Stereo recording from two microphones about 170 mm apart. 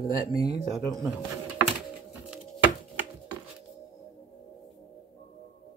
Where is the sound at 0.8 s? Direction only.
Centre (ahead or behind).